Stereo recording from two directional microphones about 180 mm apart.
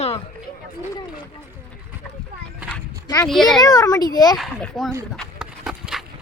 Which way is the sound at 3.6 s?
20° left (ahead or behind).